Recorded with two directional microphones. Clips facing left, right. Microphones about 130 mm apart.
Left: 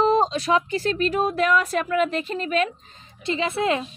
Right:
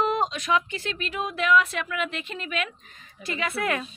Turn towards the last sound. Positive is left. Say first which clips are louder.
# left 5 dB
turn(degrees=25)  # may be behind; listen again after turning